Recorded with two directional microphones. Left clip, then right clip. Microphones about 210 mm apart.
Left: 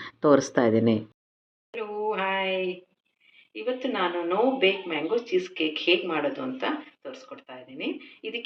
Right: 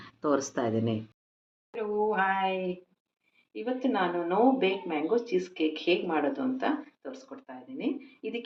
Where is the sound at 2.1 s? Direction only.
50° right (ahead or behind).